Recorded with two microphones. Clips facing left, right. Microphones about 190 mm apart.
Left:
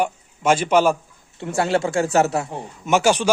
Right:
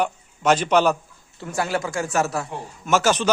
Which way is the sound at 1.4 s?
25° left (ahead or behind).